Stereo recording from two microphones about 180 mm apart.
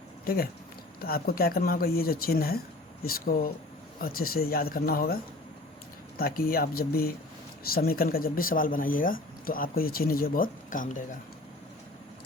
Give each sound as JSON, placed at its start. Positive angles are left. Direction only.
{"t": 1.0, "sound": "speech", "side_deg": 55}